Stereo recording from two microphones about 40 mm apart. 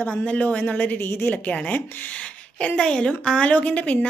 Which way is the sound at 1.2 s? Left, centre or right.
Left.